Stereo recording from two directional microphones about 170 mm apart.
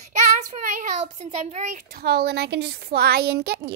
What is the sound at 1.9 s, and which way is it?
A woman's voice, 70° right (ahead or behind).